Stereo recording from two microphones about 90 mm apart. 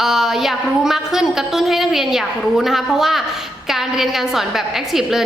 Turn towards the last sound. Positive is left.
turn(degrees=-5)  # may be behind; listen again after turning